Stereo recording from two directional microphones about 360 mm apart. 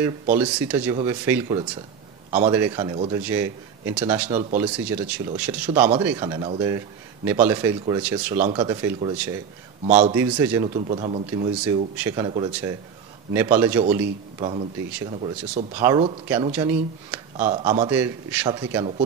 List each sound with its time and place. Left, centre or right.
0.4 s a man's voice: centre
4.3 s a man's voice: centre
4.7 s speech: centre
5.7 s a man's voice: centre
9.8 s a man's voice: centre
10.1 s a man's voice: centre
11.6 s a man's voice: centre